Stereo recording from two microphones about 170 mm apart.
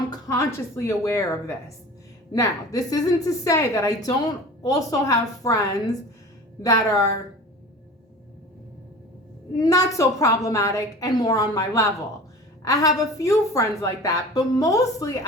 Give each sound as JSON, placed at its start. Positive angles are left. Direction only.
{"t": 0.1, "sound": "a woman's voice", "side_deg": 20}
{"t": 9.6, "sound": "a woman's voice", "side_deg": 20}